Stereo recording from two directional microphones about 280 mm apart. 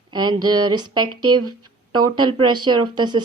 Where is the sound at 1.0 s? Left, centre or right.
Right.